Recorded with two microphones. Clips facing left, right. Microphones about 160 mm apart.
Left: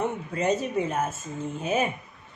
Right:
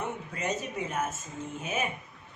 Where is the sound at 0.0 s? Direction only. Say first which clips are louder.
Left 7 dB; 30° left (ahead or behind).